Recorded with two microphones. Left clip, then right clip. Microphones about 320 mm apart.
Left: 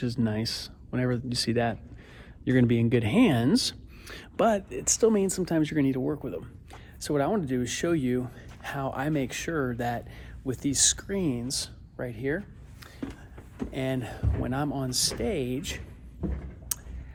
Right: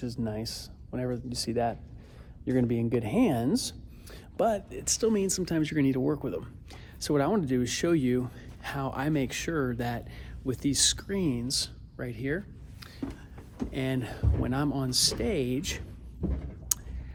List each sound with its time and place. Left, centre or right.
0.0 s a man's voice: left; by 12.4 s centre
13.7 s speech: centre
16.7 s clicking: centre